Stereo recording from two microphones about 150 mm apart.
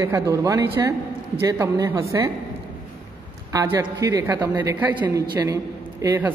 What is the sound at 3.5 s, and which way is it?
A woman's voice, 20° right (ahead or behind).